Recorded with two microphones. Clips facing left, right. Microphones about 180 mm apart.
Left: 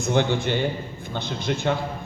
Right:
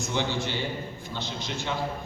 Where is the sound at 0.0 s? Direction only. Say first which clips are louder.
Left 7 dB; 55° left (ahead or behind).